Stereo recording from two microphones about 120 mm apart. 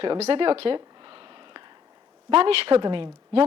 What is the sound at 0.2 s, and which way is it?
Speech, 55° right (ahead or behind).